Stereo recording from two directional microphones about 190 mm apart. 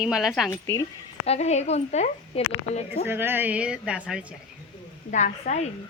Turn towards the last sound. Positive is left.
turn(degrees=35)  # may be behind; listen again after turning